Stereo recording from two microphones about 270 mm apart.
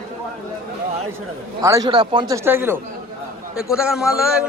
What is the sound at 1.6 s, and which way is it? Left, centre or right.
A man's voice, centre.